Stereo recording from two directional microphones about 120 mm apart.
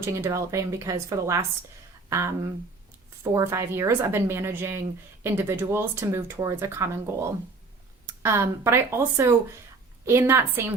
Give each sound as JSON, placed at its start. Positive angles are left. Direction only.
{"t": 0.0, "sound": "a woman's voice", "side_deg": -25}
{"t": 8.2, "sound": "a woman's voice", "side_deg": -20}